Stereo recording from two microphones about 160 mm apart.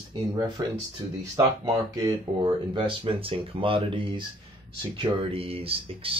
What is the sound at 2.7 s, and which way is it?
Speech, 30° right (ahead or behind).